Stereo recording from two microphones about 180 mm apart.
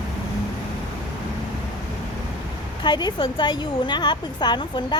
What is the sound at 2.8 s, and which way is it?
A woman's voice, 25° left (ahead or behind).